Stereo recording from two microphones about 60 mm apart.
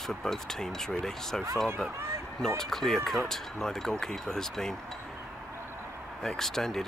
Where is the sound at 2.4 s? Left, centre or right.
Centre.